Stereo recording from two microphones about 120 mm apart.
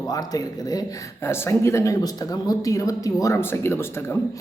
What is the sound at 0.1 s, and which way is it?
A man's voice, 30° left (ahead or behind).